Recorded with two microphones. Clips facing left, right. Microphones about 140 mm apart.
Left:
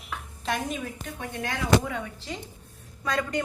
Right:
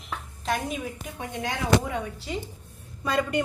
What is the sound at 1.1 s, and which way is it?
Speech, 15° right (ahead or behind).